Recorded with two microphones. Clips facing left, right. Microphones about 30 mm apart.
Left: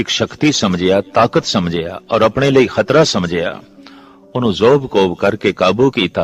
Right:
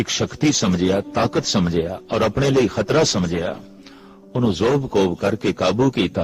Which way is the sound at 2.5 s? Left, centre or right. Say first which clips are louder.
Left 6 dB; centre.